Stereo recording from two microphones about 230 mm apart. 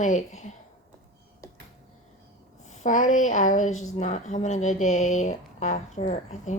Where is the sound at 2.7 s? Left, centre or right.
Left.